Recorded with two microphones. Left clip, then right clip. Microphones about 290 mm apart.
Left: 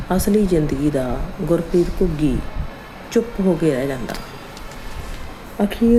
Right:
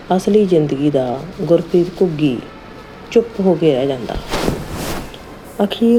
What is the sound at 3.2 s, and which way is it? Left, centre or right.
Speech, centre.